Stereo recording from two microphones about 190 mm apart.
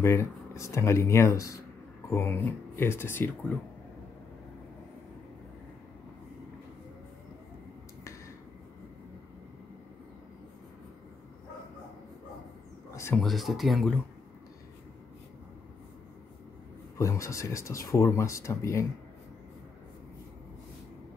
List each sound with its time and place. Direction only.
0.0 s speech: 15° left (ahead or behind)
12.9 s a sound: 15° left (ahead or behind)
13.2 s speech: centre (ahead or behind)
17.0 s speech: 15° left (ahead or behind)